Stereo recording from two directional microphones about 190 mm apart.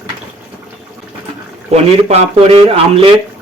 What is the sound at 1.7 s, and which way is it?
A man's voice, 35° right (ahead or behind).